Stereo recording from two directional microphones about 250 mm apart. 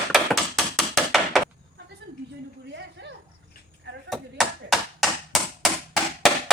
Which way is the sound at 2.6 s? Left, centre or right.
Right.